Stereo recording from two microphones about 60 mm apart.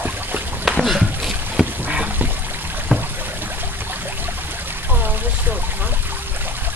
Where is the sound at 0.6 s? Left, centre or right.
Centre.